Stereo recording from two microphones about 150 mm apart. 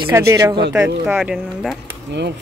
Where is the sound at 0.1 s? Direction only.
20° right (ahead or behind).